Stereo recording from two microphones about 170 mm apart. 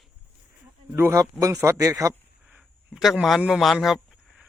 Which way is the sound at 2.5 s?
5° right (ahead or behind).